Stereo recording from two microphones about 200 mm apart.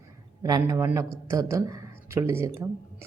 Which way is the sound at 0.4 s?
15° right (ahead or behind).